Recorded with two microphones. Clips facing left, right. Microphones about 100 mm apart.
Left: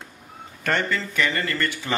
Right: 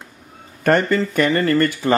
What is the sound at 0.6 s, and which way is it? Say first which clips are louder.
Speech: right 8 dB; 45° right (ahead or behind).